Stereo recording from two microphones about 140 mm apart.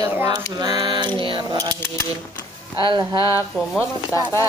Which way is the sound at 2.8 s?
35° right (ahead or behind).